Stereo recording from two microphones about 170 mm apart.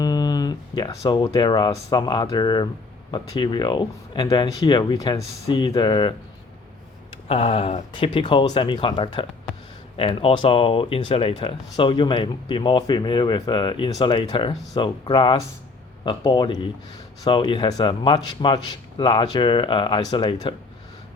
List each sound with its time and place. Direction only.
0.0 s speech: 25° left (ahead or behind)
7.3 s speech: 35° left (ahead or behind)